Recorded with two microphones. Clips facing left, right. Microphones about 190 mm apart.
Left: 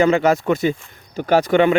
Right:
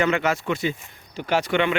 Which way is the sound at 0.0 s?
35° left (ahead or behind).